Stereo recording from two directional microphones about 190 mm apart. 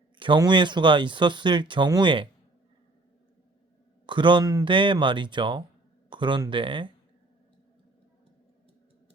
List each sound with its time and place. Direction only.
0.2 s speech: 25° right (ahead or behind)
4.0 s speech: 25° right (ahead or behind)